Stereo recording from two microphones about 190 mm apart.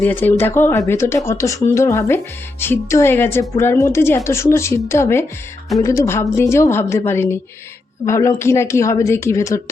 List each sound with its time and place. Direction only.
0.0 s speech: 10° left (ahead or behind)